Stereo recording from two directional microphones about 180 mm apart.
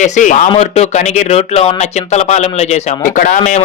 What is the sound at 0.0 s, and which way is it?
A man's voice, 45° left (ahead or behind).